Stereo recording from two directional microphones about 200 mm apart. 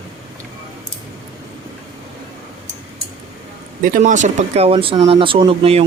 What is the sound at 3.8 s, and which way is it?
Speech, 40° right (ahead or behind).